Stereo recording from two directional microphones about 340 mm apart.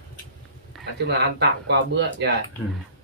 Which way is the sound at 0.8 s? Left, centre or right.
Right.